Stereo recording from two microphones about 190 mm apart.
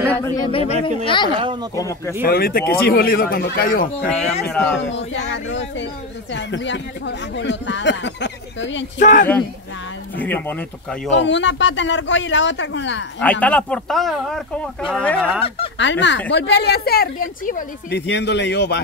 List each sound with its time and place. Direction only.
0.1 s speech: 15° left (ahead or behind)
0.5 s speech: 30° left (ahead or behind)
1.4 s speech: 25° right (ahead or behind)
1.8 s speech: 15° left (ahead or behind)
2.2 s a man's voice: 55° left (ahead or behind)
4.5 s speech: 5° left (ahead or behind)
5.3 s speech: 80° left
9.0 s a man's voice: 40° left (ahead or behind)
10.1 s speech: 10° left (ahead or behind)
11.1 s speech: 70° left (ahead or behind)
13.2 s speech: 5° left (ahead or behind)
15.8 s speech: 70° left (ahead or behind); by 17.6 s 45° left (ahead or behind)
17.8 s speech: 65° left (ahead or behind)